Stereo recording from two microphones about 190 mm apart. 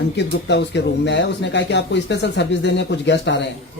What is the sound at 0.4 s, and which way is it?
Speech, 65° left (ahead or behind).